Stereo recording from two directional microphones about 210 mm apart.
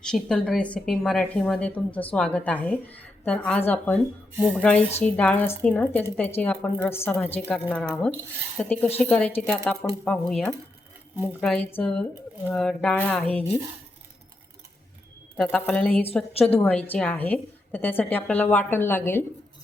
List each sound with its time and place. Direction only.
0.0 s a woman's voice: 5° left (ahead or behind)
4.4 s a woman's voice: 5° right (ahead or behind)
15.4 s a woman's voice: 5° left (ahead or behind)
16.3 s a woman's voice: 30° left (ahead or behind)
16.6 s a woman's voice: 5° left (ahead or behind)